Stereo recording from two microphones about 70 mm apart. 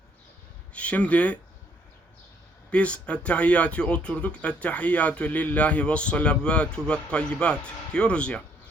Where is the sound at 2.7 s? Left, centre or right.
Centre.